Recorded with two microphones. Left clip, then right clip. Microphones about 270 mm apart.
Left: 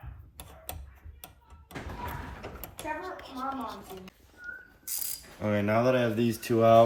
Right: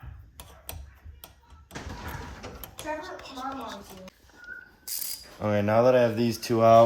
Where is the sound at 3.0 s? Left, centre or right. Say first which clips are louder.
Even; right.